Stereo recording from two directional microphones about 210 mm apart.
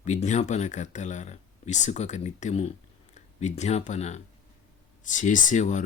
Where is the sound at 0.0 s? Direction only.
35° left (ahead or behind).